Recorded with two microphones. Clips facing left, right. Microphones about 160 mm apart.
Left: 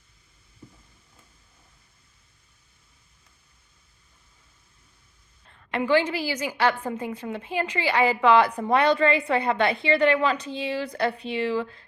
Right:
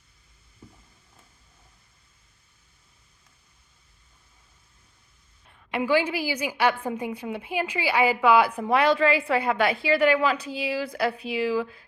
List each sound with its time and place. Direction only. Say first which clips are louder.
5.5 s a woman's voice: left 1 dB; 10° right (ahead or behind)